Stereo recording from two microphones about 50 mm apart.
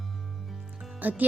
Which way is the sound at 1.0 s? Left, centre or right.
Right.